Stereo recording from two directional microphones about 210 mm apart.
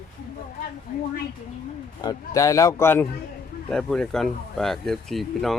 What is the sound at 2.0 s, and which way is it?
Speech, 15° left (ahead or behind).